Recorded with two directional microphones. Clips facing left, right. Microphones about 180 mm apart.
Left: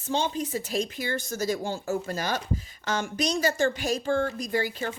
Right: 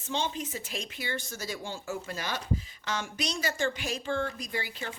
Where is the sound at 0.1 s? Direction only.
40° left (ahead or behind).